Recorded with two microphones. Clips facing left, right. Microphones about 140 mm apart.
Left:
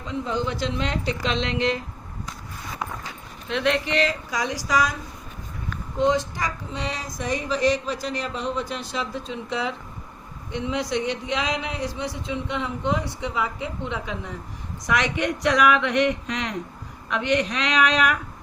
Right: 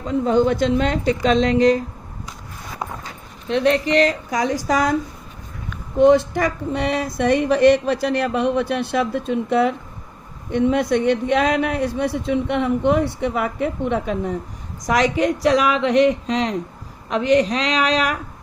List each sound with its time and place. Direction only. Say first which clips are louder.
0.0 s a woman's voice: right 10 dB; 50° right (ahead or behind)
3.5 s a woman's voice: right 6 dB; 35° right (ahead or behind); by 4.9 s 55° right (ahead or behind)
6.0 s speech: right 8 dB; 60° right (ahead or behind)
14.8 s a woman's voice: right 6 dB; 35° right (ahead or behind)